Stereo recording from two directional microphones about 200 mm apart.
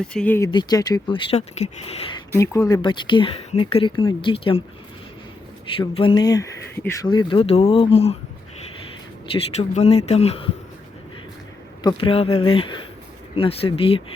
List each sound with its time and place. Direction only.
0.0 s speech: 5° left (ahead or behind); by 2.1 s 30° left (ahead or behind)
2.3 s speech: 15° left (ahead or behind)
5.7 s speech: 25° left (ahead or behind)
9.3 s speech: 30° left (ahead or behind)
11.8 s speech: 25° left (ahead or behind)